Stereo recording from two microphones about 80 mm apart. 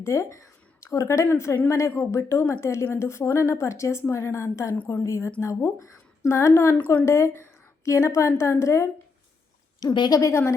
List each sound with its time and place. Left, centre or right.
0.0 s a woman's voice: left
10.1 s a woman's voice: left